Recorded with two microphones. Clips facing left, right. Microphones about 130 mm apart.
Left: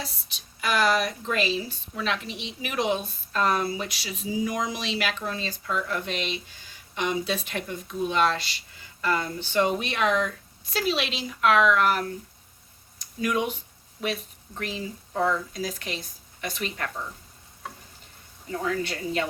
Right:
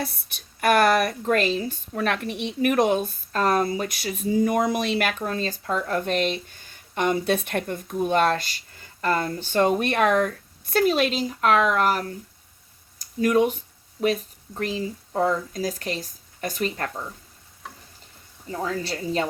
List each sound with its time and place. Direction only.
0.0 s a woman's voice: 55° right (ahead or behind); by 16.9 s 40° right (ahead or behind)
18.7 s speech: 35° right (ahead or behind)